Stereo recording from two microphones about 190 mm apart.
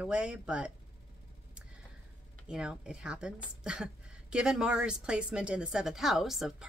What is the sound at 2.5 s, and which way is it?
A woman's voice, 5° right (ahead or behind).